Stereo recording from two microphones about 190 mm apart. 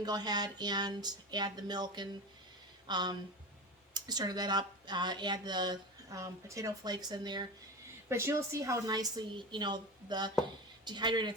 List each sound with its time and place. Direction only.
0.0 s speech: 20° right (ahead or behind)